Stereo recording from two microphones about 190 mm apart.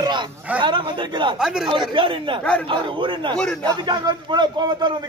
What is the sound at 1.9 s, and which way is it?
A man's voice, 25° right (ahead or behind).